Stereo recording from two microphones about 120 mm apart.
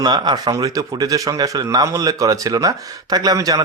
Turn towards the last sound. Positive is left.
turn(degrees=-30)  # may be behind; listen again after turning